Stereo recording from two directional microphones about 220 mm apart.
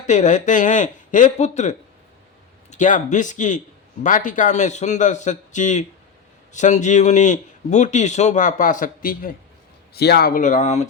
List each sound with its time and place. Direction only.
0.1 s speech: 35° left (ahead or behind)